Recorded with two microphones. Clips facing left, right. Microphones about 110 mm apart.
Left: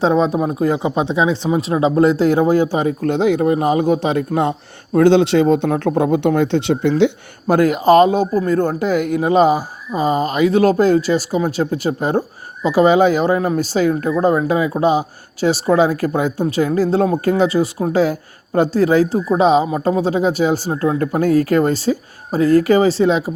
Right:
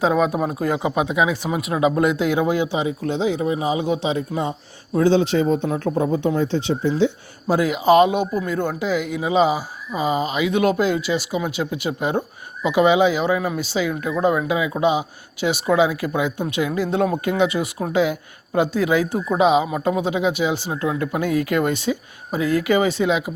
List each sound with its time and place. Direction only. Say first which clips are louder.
0.0 s speech: left 3 dB; 25° left (ahead or behind)